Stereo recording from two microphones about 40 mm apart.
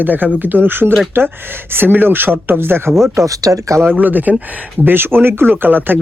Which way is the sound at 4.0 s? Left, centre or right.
Right.